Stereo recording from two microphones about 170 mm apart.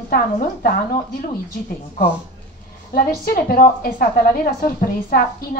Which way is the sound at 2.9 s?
60° left (ahead or behind).